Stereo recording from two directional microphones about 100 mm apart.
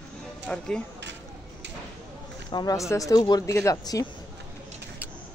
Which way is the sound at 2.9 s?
35° left (ahead or behind).